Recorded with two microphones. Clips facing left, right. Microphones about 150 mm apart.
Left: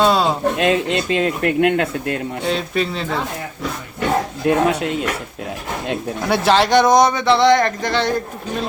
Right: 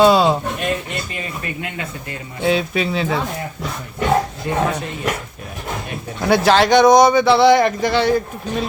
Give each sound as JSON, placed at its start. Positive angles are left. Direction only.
{"t": 0.0, "sound": "a man's voice", "side_deg": 0}
{"t": 0.5, "sound": "speech", "side_deg": 90}
{"t": 2.4, "sound": "a man's voice", "side_deg": -5}
{"t": 4.4, "sound": "speech", "side_deg": 80}
{"t": 6.2, "sound": "a man's voice", "side_deg": 0}